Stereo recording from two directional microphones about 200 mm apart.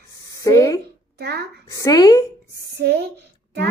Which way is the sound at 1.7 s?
15° left (ahead or behind).